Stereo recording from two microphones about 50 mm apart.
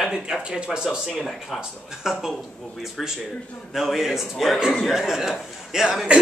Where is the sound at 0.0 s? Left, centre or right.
Centre.